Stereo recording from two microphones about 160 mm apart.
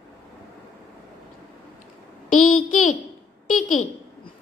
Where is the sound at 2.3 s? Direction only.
55° left (ahead or behind).